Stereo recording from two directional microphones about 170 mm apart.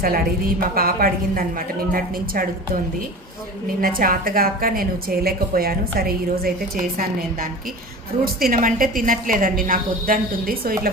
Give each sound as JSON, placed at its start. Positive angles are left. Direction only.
{"t": 0.0, "sound": "a woman's voice", "side_deg": -60}
{"t": 3.8, "sound": "a woman's voice", "side_deg": -55}